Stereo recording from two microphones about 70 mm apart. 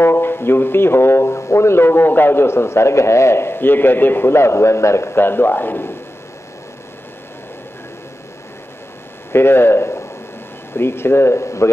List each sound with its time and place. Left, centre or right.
0.0 s speech: left
9.3 s speech: left